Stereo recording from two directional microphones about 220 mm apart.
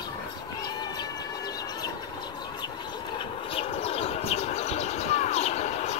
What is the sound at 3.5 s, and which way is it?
Bird, 25° left (ahead or behind).